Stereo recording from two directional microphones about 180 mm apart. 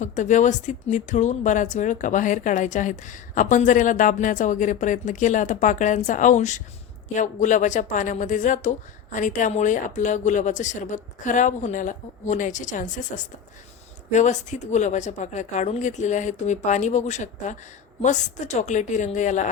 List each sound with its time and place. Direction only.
0.0 s speech: 45° left (ahead or behind)